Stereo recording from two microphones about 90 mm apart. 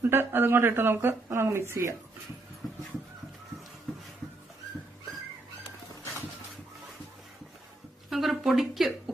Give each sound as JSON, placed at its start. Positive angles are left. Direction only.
{"t": 0.0, "sound": "speech", "side_deg": -25}
{"t": 8.1, "sound": "speech", "side_deg": 0}